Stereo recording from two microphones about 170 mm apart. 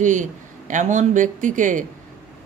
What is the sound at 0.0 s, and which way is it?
Speech, 45° right (ahead or behind).